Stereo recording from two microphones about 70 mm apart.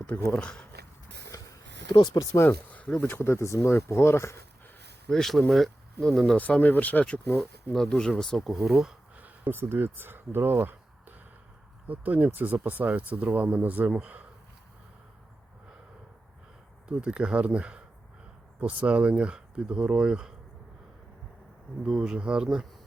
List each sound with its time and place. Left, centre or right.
0.0 s speech: centre
1.3 s a sound: left
2.5 s a sound: left
3.2 s speech: left
5.0 s speech: centre
6.3 s speech: left
7.3 s speech: centre
9.1 s speech: right
11.9 s speech: right
16.9 s speech: centre
21.8 s speech: centre